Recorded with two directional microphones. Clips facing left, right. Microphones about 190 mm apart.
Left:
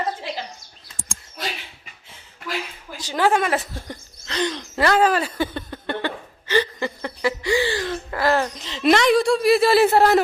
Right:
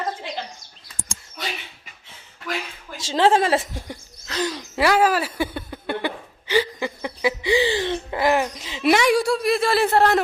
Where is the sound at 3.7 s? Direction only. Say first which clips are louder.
Even; 5° right (ahead or behind).